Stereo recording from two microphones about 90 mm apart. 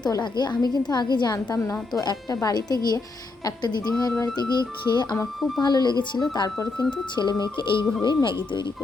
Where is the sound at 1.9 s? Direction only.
50° left (ahead or behind).